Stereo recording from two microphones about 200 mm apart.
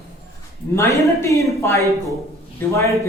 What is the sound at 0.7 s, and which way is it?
A man's voice, 15° left (ahead or behind).